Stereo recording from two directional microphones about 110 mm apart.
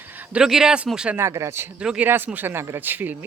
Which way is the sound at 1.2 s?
25° right (ahead or behind).